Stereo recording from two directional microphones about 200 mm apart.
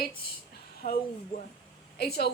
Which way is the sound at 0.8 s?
45° left (ahead or behind).